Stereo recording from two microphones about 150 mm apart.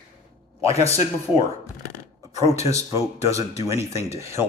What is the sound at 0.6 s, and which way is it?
Speech, 20° right (ahead or behind).